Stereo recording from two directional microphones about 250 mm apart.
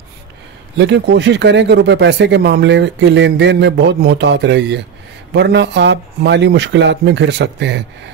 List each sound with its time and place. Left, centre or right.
0.7 s speech: right